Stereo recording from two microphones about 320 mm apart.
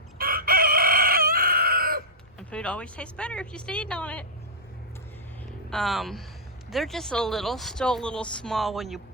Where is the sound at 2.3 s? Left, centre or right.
Centre.